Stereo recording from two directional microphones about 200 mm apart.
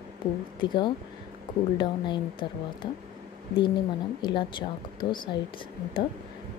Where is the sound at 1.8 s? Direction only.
25° left (ahead or behind).